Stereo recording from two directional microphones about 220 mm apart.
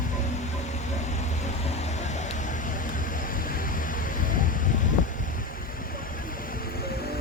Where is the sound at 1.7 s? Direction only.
30° left (ahead or behind).